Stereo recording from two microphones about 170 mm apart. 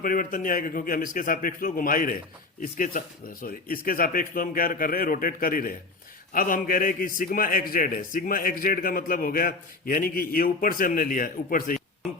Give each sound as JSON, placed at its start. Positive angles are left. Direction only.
{"t": 0.0, "sound": "a man's voice", "side_deg": 55}